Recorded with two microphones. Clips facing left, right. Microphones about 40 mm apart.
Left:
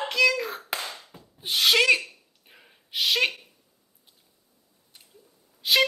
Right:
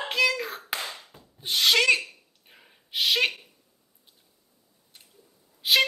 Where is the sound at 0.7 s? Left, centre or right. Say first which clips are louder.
Even; right.